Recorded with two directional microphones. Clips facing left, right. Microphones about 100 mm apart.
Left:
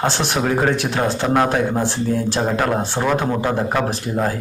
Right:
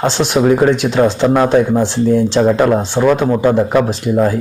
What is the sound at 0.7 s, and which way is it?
Speech, 20° right (ahead or behind).